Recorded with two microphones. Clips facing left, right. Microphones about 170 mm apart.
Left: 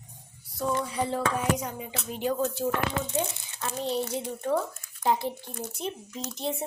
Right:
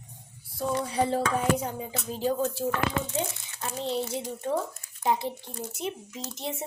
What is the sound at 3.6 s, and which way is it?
Speech, 20° right (ahead or behind).